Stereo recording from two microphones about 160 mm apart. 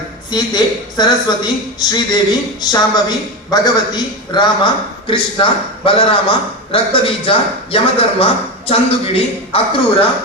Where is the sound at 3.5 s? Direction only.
25° left (ahead or behind).